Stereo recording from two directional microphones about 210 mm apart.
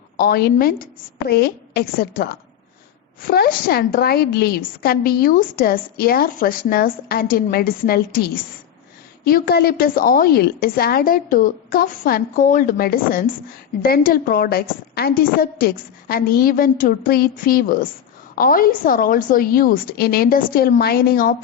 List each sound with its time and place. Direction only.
0.2 s a woman's voice: 45° left (ahead or behind)